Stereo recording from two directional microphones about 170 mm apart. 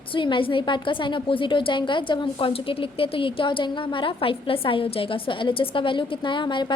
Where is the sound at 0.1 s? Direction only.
30° left (ahead or behind).